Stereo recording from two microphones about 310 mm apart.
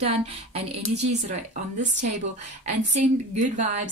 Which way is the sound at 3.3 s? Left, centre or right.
Right.